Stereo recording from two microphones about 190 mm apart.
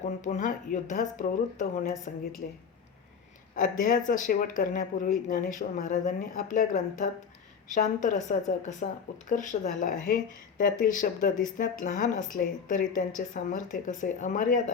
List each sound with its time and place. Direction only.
0.2 s speech: 40° left (ahead or behind)
3.5 s a woman's voice: 45° left (ahead or behind)